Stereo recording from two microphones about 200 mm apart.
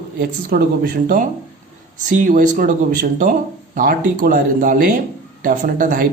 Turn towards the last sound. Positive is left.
turn(degrees=-45)  # may be behind; listen again after turning